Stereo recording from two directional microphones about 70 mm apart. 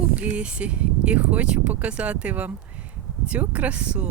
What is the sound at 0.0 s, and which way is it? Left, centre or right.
Speech, centre.